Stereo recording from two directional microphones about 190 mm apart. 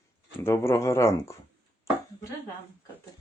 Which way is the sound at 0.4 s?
15° left (ahead or behind).